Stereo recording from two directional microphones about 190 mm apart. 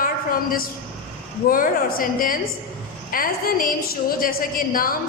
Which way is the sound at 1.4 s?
50° left (ahead or behind).